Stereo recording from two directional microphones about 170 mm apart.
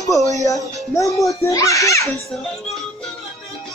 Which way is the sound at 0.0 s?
20° left (ahead or behind).